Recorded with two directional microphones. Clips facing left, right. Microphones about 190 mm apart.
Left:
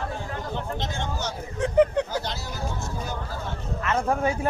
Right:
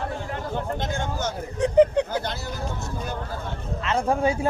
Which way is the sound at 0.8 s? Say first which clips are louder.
Right 3 dB; 50° right (ahead or behind).